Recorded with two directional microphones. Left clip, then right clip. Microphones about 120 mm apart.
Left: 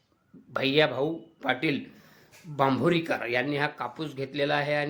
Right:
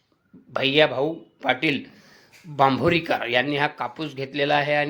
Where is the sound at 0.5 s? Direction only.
15° right (ahead or behind).